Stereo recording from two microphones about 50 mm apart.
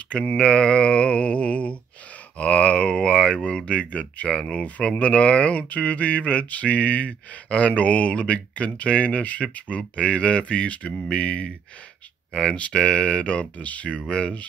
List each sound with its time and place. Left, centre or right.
0.1 s speech: left
0.5 s mantra: centre
2.3 s speech: left
12.5 s speech: left